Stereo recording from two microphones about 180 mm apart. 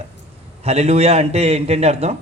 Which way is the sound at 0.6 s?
35° right (ahead or behind).